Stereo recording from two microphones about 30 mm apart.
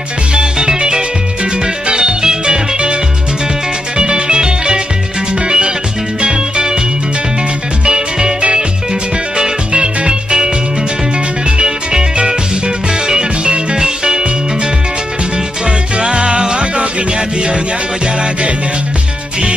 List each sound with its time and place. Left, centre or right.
0.3 s music: right
3.9 s music: right
6.2 s music: right
7.8 s music: right
9.4 s music: right
11.5 s music: right
16.0 s music: right